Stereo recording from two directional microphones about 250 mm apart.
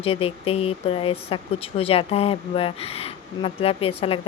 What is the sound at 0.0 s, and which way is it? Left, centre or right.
Speech, left.